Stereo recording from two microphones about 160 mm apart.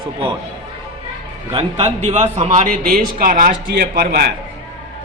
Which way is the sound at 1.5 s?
40° right (ahead or behind).